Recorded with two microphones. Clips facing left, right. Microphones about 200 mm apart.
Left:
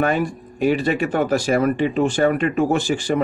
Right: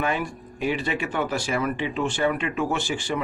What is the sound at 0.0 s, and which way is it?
Speech, 45° left (ahead or behind).